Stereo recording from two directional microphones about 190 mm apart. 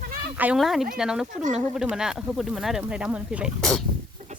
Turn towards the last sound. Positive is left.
turn(degrees=0)  # may be behind; listen again after turning